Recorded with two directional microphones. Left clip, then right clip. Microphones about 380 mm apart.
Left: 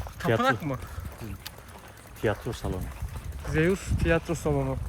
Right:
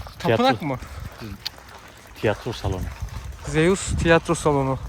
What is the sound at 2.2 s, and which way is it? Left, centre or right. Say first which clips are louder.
Speech: right 5 dB; right.